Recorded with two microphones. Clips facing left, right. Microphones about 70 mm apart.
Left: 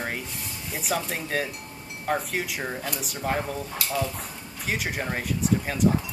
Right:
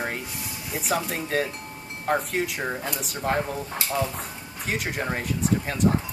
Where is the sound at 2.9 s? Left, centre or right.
Centre.